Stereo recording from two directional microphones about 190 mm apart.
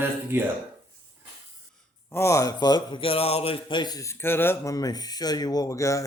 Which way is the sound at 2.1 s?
15° left (ahead or behind).